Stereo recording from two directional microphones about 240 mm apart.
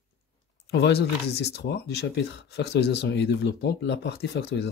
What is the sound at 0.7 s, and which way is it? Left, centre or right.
Speech, left.